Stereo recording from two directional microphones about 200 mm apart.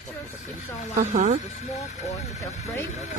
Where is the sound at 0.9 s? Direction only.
40° right (ahead or behind).